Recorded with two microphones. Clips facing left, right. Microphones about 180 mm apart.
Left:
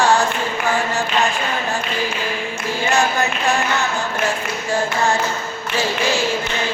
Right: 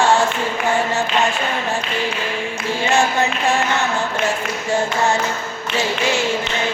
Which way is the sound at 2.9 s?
25° right (ahead or behind).